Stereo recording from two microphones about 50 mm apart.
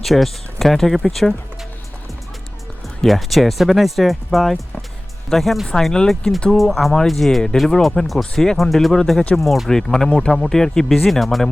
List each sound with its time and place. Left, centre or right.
0.0 s speech: centre
3.0 s speech: centre
5.7 s speech: centre
6.6 s speech: centre
8.2 s speech: centre